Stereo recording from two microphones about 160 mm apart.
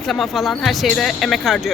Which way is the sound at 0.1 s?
Centre (ahead or behind).